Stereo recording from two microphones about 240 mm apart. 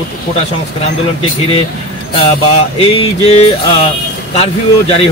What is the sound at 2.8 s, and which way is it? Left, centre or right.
Speech, left.